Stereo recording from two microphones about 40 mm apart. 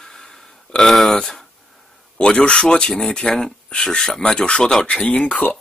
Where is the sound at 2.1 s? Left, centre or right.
Left.